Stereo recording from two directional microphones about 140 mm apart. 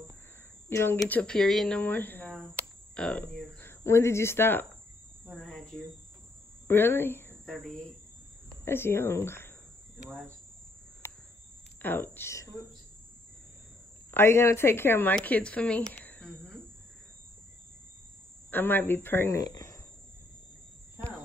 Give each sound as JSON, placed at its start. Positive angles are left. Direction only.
{"t": 0.7, "sound": "speech", "side_deg": 15}
{"t": 5.4, "sound": "cricket", "side_deg": 0}
{"t": 6.7, "sound": "speech", "side_deg": 15}
{"t": 8.6, "sound": "speech", "side_deg": 15}
{"t": 11.8, "sound": "speech", "side_deg": 15}
{"t": 14.1, "sound": "speech", "side_deg": 15}
{"t": 18.5, "sound": "speech", "side_deg": 15}